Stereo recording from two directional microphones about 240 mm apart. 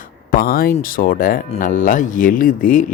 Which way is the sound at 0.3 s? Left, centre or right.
Left.